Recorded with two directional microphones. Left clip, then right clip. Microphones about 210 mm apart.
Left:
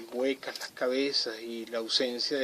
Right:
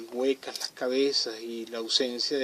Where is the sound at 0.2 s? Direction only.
20° right (ahead or behind).